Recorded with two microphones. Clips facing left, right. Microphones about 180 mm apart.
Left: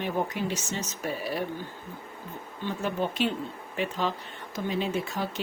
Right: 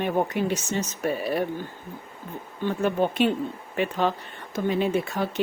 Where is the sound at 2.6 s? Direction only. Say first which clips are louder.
Right 6 dB; 55° right (ahead or behind).